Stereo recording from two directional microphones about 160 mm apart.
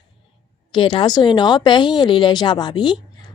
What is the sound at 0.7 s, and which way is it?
Speech, 30° left (ahead or behind).